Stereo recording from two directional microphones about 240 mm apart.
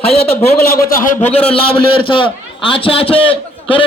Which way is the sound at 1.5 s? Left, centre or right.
Left.